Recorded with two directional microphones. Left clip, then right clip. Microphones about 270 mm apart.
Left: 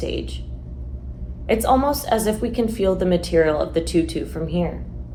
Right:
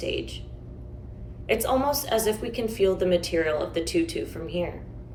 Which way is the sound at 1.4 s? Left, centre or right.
Centre.